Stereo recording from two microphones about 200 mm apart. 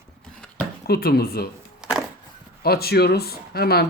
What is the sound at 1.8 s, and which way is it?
Wood, 5° right (ahead or behind).